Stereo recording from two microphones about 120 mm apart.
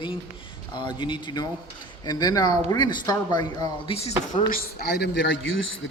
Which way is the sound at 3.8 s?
60° left (ahead or behind).